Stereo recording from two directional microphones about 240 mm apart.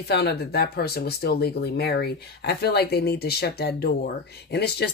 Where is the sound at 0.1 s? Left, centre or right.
Left.